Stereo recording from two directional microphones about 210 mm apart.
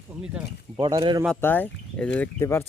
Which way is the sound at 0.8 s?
20° right (ahead or behind).